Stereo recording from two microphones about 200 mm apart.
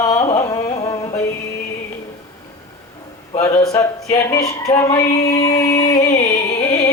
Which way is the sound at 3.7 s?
15° left (ahead or behind).